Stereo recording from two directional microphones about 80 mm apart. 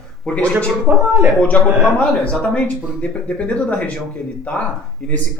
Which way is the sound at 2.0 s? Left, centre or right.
Centre.